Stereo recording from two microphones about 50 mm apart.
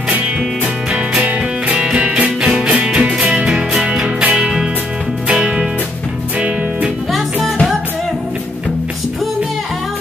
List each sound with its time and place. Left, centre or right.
2.0 s music: right